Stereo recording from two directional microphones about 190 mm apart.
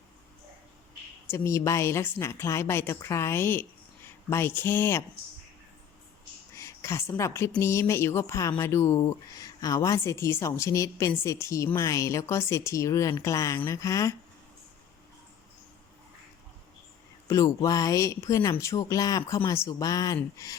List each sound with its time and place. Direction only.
1.3 s a woman's voice: 15° left (ahead or behind)
6.6 s a woman's voice: 15° left (ahead or behind)
17.2 s a woman's voice: 15° left (ahead or behind)